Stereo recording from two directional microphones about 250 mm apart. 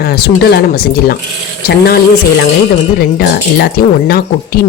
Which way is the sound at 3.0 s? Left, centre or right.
Left.